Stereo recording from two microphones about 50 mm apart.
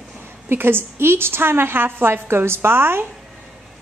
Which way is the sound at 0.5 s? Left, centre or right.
Right.